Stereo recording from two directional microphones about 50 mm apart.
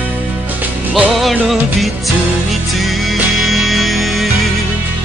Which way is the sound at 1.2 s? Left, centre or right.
Centre.